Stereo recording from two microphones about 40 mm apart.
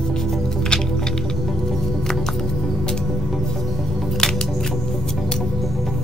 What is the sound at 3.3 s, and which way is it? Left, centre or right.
Music, centre.